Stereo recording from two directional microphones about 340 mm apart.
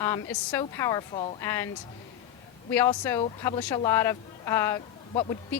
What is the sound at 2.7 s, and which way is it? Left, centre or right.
Speech, centre.